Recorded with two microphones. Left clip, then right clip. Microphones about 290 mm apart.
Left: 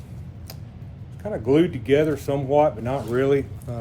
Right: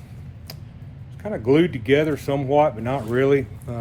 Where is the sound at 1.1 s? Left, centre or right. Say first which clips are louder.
Right 1 dB; right.